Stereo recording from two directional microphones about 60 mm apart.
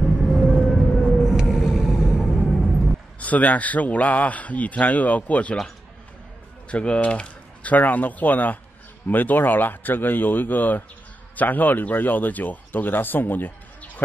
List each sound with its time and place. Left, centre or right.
0.3 s music: centre
1.1 s vehicle: centre
2.3 s music: centre
3.2 s a man's voice: left
6.7 s a man's voice: centre